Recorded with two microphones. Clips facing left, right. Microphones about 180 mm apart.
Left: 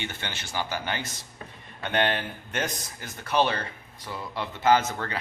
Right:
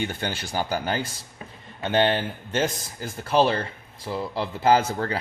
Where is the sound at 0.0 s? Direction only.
40° right (ahead or behind).